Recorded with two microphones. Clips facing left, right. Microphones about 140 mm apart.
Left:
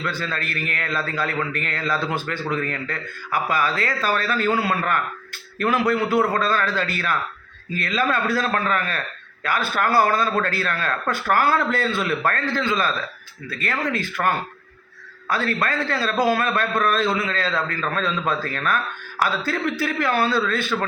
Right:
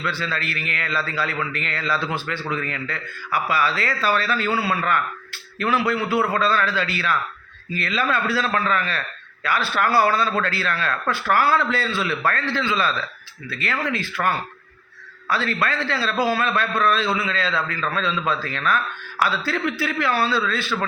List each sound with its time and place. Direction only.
0.0 s a man's voice: 45° left (ahead or behind)